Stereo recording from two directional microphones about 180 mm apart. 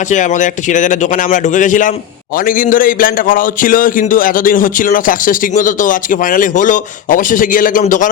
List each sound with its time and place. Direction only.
0.1 s a man's voice: 45° left (ahead or behind)